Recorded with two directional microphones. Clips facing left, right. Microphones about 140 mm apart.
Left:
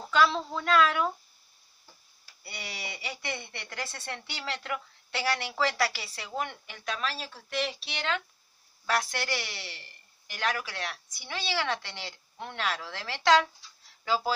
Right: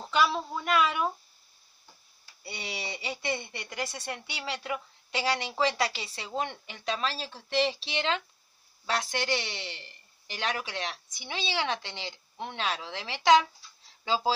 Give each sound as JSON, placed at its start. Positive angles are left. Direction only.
{"t": 0.1, "sound": "a woman's voice", "side_deg": -15}
{"t": 2.4, "sound": "speech", "side_deg": -20}